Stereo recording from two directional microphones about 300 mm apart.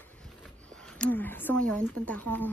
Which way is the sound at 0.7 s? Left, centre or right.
Centre.